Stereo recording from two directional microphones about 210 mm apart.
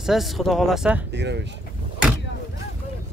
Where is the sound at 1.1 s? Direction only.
55° right (ahead or behind).